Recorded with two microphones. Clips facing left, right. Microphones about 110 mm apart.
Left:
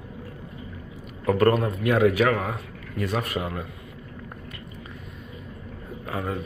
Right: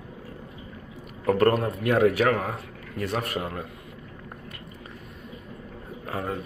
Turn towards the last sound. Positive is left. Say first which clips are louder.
# left 1 dB
turn(degrees=-40)  # may be behind; listen again after turning